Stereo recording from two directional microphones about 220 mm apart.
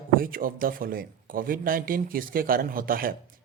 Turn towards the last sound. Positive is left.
turn(degrees=-40)  # may be behind; listen again after turning